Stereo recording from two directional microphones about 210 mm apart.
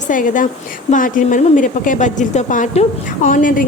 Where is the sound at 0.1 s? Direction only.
40° left (ahead or behind).